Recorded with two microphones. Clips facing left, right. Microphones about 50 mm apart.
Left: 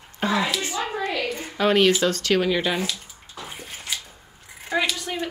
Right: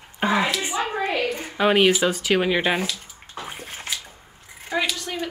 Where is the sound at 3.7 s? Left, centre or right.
Centre.